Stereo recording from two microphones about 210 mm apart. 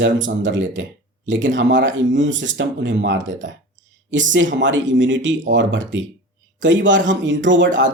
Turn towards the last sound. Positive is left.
turn(degrees=-60)  # may be behind; listen again after turning